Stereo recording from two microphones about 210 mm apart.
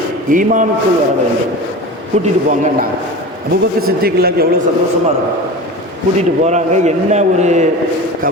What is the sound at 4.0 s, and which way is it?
Speech, 50° right (ahead or behind).